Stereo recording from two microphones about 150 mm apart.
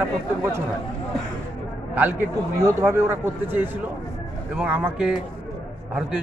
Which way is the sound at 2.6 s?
20° right (ahead or behind).